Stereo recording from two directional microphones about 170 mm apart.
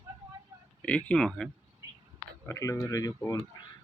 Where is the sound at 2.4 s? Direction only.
20° left (ahead or behind).